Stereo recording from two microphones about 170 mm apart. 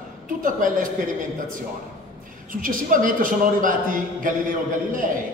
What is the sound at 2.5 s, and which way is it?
A man's voice, 55° right (ahead or behind).